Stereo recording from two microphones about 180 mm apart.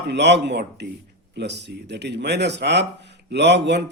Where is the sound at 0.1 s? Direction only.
75° right (ahead or behind).